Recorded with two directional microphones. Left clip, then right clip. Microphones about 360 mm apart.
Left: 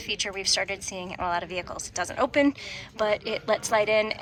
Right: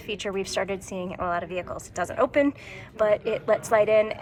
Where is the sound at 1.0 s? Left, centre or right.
Centre.